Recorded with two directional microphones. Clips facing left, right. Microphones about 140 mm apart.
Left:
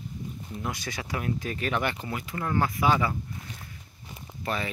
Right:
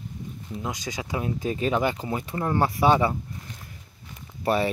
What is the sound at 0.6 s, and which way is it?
Speech, 15° right (ahead or behind).